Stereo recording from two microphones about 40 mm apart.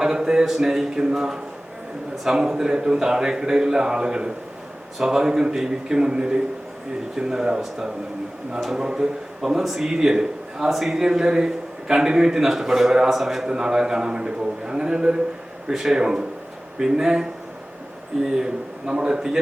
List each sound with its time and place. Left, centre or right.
0.0 s a man's voice: centre